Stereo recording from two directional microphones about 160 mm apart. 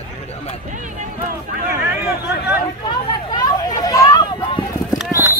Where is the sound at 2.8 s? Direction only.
25° left (ahead or behind).